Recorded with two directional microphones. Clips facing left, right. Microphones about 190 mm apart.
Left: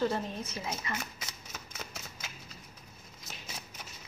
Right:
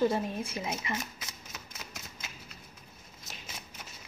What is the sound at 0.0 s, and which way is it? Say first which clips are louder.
Speech: right 3 dB; 15° right (ahead or behind).